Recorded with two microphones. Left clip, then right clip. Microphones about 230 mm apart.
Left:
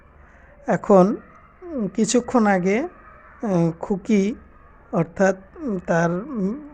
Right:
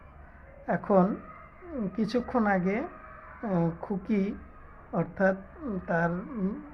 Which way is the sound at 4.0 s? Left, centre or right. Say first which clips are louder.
Left 10 dB; left.